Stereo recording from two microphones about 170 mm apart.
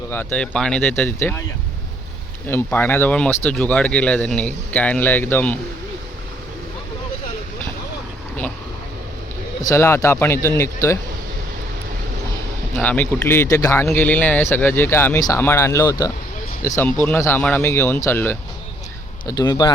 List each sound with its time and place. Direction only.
0.1 s speech: 10° left (ahead or behind)
2.5 s speech: 10° left (ahead or behind)
9.6 s speech: 15° left (ahead or behind)
12.7 s speech: 10° left (ahead or behind)
19.3 s speech: 25° left (ahead or behind)